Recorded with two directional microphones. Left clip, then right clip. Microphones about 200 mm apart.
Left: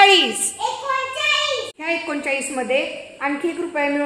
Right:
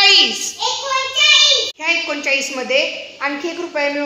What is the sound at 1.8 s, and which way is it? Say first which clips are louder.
A woman's voice: right 2 dB; 40° left (ahead or behind).